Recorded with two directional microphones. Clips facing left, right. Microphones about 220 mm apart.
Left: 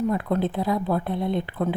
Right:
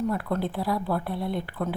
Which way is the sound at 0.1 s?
20° left (ahead or behind).